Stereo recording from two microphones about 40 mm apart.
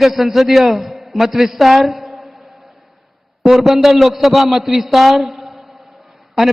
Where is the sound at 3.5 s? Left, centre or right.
Centre.